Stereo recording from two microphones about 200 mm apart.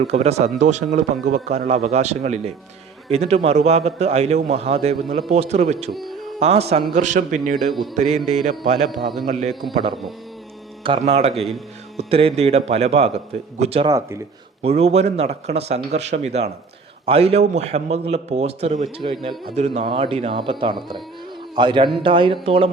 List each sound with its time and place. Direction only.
0.1 s a man's voice: 35° right (ahead or behind)
5.9 s music: centre (ahead or behind)
6.4 s a man's voice: 30° right (ahead or behind)
9.9 s speech: centre (ahead or behind)
10.8 s a man's voice: 30° right (ahead or behind)
13.8 s speech: 15° right (ahead or behind)
14.6 s a man's voice: 30° right (ahead or behind)